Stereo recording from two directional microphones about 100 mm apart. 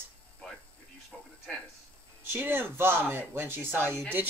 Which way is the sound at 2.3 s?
20° right (ahead or behind).